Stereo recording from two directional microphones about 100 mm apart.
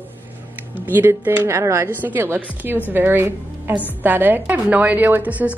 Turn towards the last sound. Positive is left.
turn(degrees=-15)  # may be behind; listen again after turning